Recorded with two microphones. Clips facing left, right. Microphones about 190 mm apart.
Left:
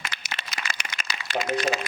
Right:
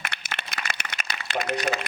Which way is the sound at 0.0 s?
60° right (ahead or behind).